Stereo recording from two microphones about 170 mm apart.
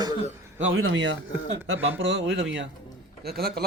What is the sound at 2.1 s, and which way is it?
Speech, 90° right.